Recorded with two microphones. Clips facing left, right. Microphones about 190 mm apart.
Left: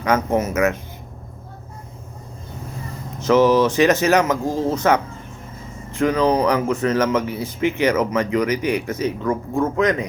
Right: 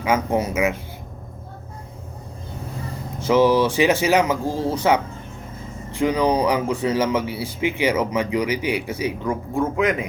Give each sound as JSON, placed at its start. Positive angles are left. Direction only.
{"t": 0.0, "sound": "speech", "side_deg": -10}
{"t": 3.2, "sound": "speech", "side_deg": -10}
{"t": 4.4, "sound": "speech", "side_deg": 15}
{"t": 4.7, "sound": "speech", "side_deg": -10}